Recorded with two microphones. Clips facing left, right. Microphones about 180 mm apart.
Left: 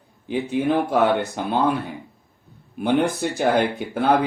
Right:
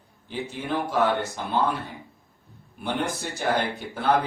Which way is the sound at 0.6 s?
60° left (ahead or behind).